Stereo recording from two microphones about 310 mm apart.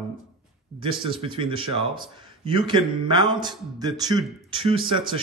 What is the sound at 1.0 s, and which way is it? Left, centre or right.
Speech, centre.